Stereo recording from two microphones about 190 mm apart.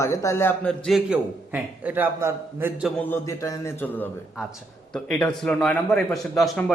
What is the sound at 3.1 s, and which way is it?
A man's voice, 15° left (ahead or behind).